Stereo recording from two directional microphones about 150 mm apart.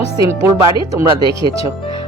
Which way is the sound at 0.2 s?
15° right (ahead or behind).